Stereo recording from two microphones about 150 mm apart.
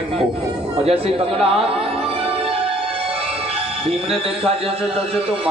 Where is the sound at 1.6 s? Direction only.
40° right (ahead or behind).